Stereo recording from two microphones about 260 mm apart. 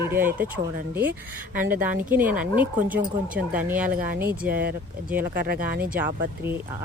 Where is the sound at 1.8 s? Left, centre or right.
Centre.